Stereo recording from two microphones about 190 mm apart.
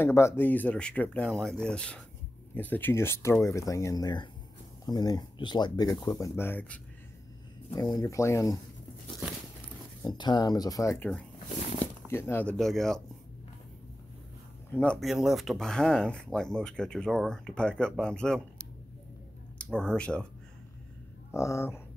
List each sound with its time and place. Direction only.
0.0 s speech: 15° left (ahead or behind)
10.0 s speech: 20° left (ahead or behind)
12.1 s speech: 15° left (ahead or behind)
14.8 s speech: 5° left (ahead or behind)
19.6 s speech: 5° left (ahead or behind)
21.3 s speech: 15° left (ahead or behind)